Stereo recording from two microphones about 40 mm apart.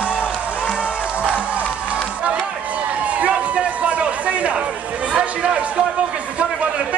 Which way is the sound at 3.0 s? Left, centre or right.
Right.